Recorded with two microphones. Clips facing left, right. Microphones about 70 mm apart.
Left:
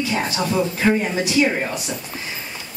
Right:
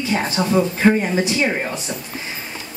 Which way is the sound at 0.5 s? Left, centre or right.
Right.